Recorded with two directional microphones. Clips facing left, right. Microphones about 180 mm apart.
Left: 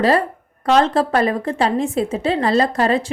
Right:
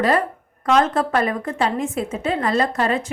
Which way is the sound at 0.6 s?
30° left (ahead or behind).